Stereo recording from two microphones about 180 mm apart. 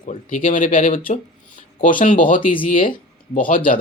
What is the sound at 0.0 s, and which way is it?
Speech, 45° left (ahead or behind).